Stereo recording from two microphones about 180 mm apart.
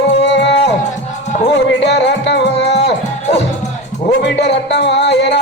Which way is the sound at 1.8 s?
70° left (ahead or behind).